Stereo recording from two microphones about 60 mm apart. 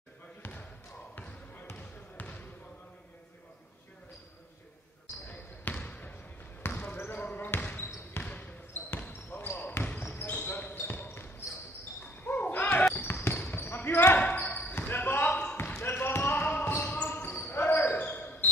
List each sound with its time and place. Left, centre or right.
0.4 s basketball bounce: left
1.8 s trickle: left
5.3 s trickle: left
6.8 s basketball bounce: left
8.2 s trickle: left
9.5 s basketball bounce: left
13.0 s basketball bounce: left
13.3 s basketball bounce: left
14.5 s basketball bounce: left